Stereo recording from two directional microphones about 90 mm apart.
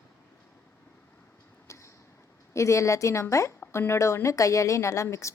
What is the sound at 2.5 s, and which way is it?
A woman's voice, 35° left (ahead or behind).